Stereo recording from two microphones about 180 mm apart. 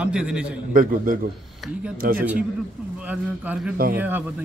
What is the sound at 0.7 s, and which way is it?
A man's voice, 50° right (ahead or behind).